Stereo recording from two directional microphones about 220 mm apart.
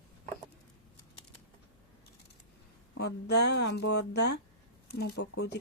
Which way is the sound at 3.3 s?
50° left (ahead or behind).